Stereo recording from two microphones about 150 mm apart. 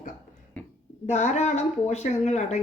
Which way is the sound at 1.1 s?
50° left (ahead or behind).